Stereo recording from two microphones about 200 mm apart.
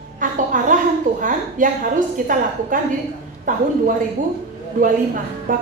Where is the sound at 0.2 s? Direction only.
40° right (ahead or behind).